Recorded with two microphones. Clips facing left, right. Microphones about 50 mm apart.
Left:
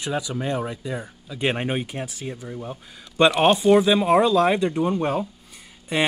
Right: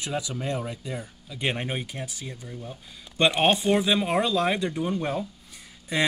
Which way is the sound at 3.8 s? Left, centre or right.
Centre.